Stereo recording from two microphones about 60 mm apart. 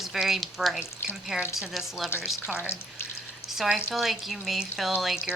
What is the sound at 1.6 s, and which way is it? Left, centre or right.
Speech, centre.